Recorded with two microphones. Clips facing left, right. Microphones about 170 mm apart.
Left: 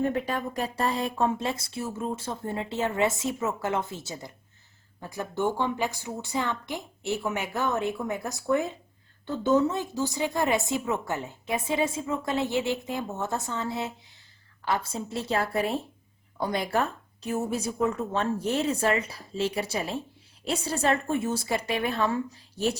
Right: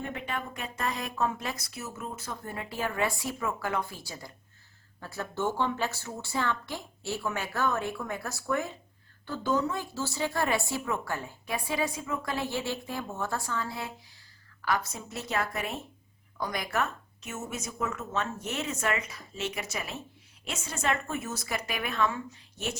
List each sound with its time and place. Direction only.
0.0 s a woman's voice: 35° left (ahead or behind)